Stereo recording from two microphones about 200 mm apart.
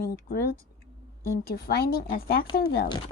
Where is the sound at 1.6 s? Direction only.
50° left (ahead or behind).